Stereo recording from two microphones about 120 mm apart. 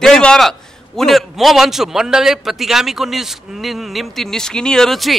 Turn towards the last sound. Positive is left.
turn(degrees=0)  # may be behind; listen again after turning